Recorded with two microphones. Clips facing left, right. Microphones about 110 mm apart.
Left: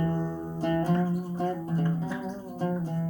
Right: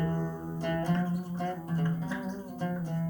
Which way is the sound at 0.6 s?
25° left (ahead or behind).